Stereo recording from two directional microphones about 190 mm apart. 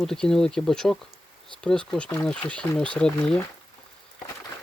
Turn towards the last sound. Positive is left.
turn(degrees=5)  # may be behind; listen again after turning